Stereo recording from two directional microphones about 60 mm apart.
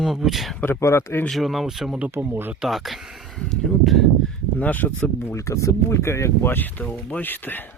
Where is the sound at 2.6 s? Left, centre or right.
Centre.